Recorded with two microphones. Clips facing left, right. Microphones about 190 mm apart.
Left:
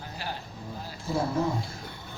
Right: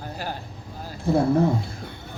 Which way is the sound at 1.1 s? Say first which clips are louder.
Right 9 dB; 60° right (ahead or behind).